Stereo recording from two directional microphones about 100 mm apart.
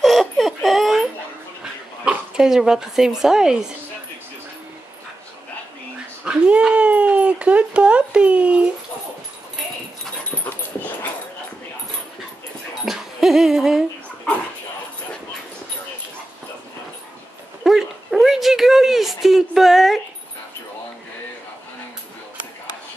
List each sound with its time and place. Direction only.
0.0 s giggle: centre (ahead or behind)
1.6 s speech: 5° right (ahead or behind)
6.2 s speech: 10° right (ahead or behind)
12.8 s dog: 5° right (ahead or behind)
17.6 s a sound: centre (ahead or behind)